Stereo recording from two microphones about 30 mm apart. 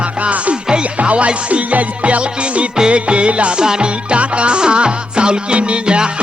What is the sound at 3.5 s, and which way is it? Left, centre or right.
Music, right.